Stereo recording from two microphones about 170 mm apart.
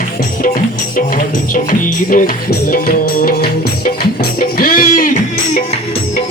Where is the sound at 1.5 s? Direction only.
55° left (ahead or behind).